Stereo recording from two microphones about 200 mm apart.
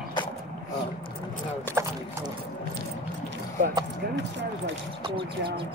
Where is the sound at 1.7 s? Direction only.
10° left (ahead or behind).